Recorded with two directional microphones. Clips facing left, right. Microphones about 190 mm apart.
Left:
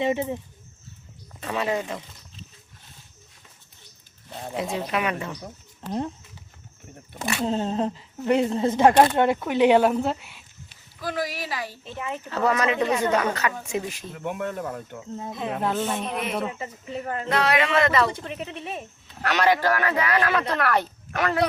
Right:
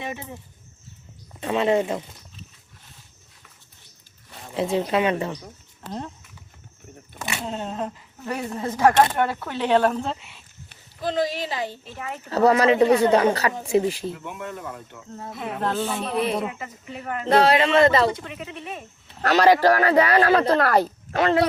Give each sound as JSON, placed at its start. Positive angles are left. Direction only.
{"t": 0.0, "sound": "speech", "side_deg": 20}
{"t": 1.4, "sound": "a woman's voice", "side_deg": -25}
{"t": 4.5, "sound": "speech", "side_deg": -30}
{"t": 7.4, "sound": "speech", "side_deg": 30}
{"t": 11.0, "sound": "a woman's voice", "side_deg": -25}
{"t": 12.3, "sound": "speech", "side_deg": -35}
{"t": 14.1, "sound": "speech", "side_deg": 50}
{"t": 15.1, "sound": "speech", "side_deg": 20}
{"t": 15.6, "sound": "speech", "side_deg": 0}
{"t": 16.0, "sound": "speech", "side_deg": -35}
{"t": 16.5, "sound": "speech", "side_deg": 30}
{"t": 17.2, "sound": "speech", "side_deg": -30}
{"t": 19.2, "sound": "speech", "side_deg": -35}